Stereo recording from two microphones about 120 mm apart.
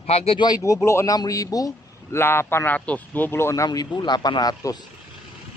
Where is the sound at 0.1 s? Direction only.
50° left (ahead or behind).